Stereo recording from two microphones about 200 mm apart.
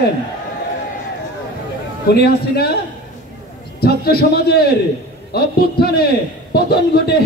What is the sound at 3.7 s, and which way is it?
A man's voice, 50° left (ahead or behind).